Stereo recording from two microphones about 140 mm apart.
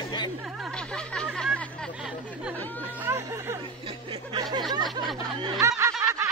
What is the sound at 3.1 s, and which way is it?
Music, 20° right (ahead or behind).